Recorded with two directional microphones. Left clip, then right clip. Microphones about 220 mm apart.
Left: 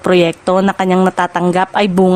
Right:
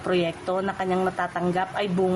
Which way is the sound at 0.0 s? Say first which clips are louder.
Left 13 dB; 50° left (ahead or behind).